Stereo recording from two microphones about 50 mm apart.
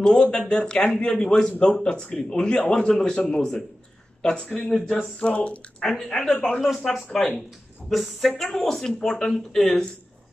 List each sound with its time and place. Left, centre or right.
0.0 s a man's voice: centre
5.2 s speech: left
6.7 s a woman's voice: centre